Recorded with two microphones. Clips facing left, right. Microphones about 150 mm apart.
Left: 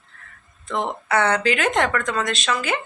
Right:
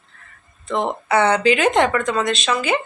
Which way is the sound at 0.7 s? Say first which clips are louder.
Right 3 dB; 25° right (ahead or behind).